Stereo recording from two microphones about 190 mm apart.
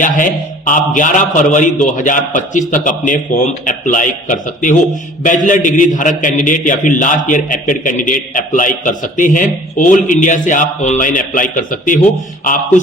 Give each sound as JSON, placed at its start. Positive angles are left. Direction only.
{"t": 0.0, "sound": "a man's voice", "side_deg": 45}